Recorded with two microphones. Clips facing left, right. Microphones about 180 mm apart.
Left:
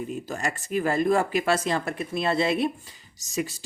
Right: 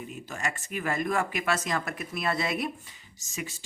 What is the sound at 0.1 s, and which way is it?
Speech, 35° left (ahead or behind).